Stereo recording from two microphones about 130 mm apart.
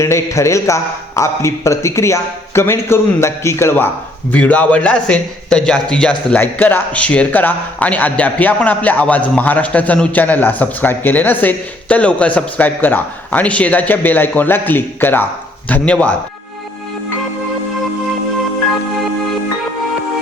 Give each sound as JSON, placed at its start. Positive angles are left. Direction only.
{"t": 0.0, "sound": "a man's voice", "side_deg": 20}